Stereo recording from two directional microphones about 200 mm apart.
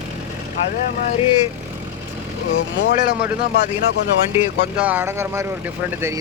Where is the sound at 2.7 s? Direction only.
55° left (ahead or behind).